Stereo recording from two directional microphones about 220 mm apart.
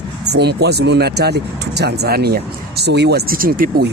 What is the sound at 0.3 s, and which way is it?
Speech, 50° right (ahead or behind).